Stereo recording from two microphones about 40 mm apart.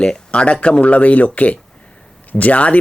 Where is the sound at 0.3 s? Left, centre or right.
Left.